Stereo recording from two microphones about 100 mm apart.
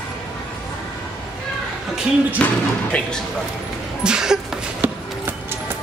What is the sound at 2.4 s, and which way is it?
Speech, 15° left (ahead or behind).